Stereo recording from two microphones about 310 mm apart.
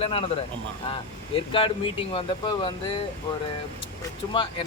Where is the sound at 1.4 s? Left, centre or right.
Centre.